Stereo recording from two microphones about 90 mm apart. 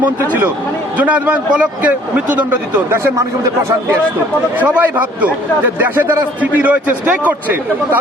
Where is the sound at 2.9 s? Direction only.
30° right (ahead or behind).